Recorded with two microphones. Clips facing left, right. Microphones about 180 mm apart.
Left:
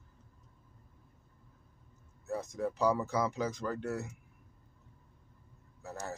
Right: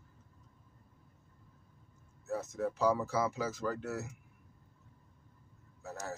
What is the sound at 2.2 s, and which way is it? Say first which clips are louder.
Speech: even; 5° right (ahead or behind).